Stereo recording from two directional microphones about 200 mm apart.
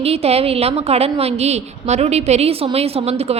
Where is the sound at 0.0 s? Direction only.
30° right (ahead or behind).